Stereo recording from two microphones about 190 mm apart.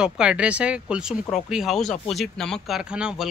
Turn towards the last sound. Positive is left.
turn(degrees=-5)  # may be behind; listen again after turning